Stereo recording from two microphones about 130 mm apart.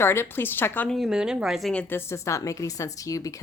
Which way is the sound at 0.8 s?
Centre (ahead or behind).